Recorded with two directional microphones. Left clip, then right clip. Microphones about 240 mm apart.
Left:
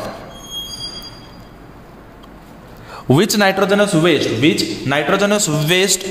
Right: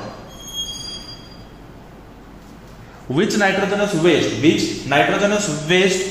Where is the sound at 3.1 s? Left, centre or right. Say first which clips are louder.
Left 3 dB; left.